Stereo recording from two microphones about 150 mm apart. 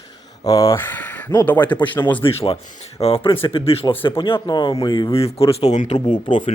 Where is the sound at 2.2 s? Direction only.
40° left (ahead or behind).